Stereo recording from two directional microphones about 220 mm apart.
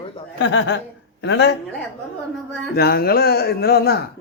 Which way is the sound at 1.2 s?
55° left (ahead or behind).